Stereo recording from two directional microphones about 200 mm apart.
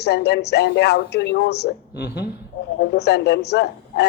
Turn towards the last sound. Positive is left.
turn(degrees=55)  # may be behind; listen again after turning